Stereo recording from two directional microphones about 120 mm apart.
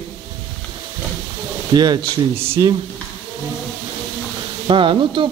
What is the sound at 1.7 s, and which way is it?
Speech, 35° right (ahead or behind).